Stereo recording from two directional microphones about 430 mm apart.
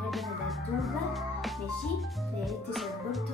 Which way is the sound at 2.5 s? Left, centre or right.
Centre.